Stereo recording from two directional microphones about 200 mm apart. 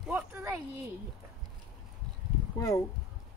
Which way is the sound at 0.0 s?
10° right (ahead or behind).